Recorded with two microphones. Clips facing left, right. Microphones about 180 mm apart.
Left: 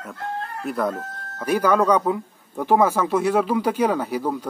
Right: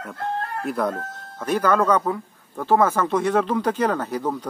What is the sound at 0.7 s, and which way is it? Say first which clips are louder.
Speech: left 1 dB; centre (ahead or behind).